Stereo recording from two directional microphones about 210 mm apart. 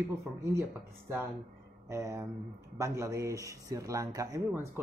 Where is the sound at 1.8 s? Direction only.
15° right (ahead or behind).